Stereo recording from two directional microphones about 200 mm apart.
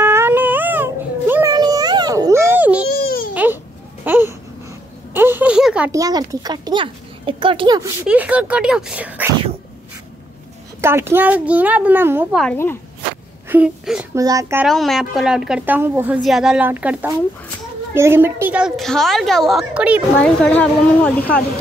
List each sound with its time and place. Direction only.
0.0 s baby cry: 10° right (ahead or behind)
2.9 s a sound: 50° left (ahead or behind)
4.0 s babbling: 10° right (ahead or behind)
5.1 s a sound: 10° right (ahead or behind)
5.9 s speech: 15° right (ahead or behind)
8.1 s a child's voice: 5° right (ahead or behind)
10.8 s a child's voice: 10° right (ahead or behind)
12.4 s speech: 5° left (ahead or behind)
13.5 s speech: 5° right (ahead or behind)
14.1 s a child's voice: 15° right (ahead or behind)
14.6 s a woman's voice: centre (ahead or behind)
20.2 s speech: 5° left (ahead or behind)